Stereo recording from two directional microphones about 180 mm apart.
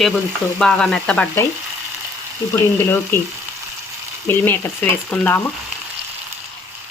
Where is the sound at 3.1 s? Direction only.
10° left (ahead or behind).